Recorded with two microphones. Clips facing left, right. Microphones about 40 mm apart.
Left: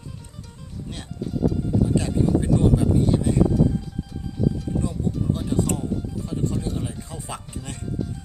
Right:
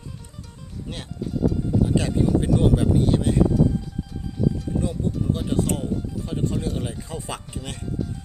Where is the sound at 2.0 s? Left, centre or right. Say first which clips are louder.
Even; right.